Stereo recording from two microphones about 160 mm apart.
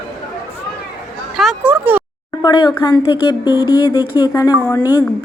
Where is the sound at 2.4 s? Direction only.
25° left (ahead or behind).